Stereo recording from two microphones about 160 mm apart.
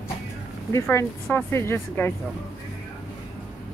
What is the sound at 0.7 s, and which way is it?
Speech, 15° left (ahead or behind).